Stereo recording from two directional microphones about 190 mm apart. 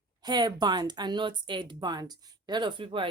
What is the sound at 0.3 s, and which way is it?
Speech, 20° right (ahead or behind).